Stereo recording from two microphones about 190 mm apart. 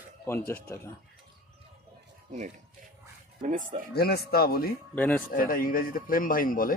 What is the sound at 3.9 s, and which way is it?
Speech, 55° left (ahead or behind).